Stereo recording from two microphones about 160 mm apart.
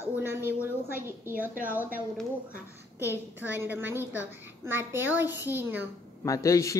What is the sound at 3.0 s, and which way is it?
A woman's voice, 15° right (ahead or behind).